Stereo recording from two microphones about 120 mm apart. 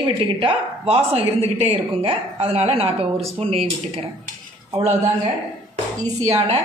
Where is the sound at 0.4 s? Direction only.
55° right (ahead or behind).